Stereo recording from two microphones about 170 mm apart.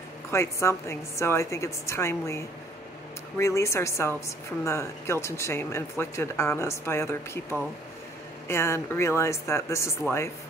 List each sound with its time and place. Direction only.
0.3 s speech: 15° left (ahead or behind)